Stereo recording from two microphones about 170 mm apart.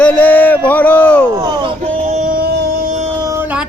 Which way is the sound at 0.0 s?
10° left (ahead or behind).